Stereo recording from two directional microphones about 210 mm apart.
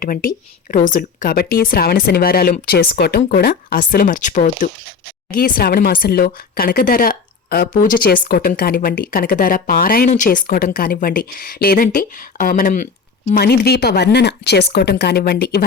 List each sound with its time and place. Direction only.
0.0 s speech: 40° left (ahead or behind)